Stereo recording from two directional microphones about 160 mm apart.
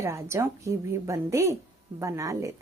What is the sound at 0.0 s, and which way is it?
Speech, 15° right (ahead or behind).